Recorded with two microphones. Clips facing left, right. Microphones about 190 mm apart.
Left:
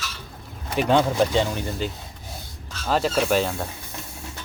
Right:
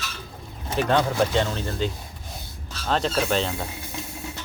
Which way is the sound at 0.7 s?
15° left (ahead or behind).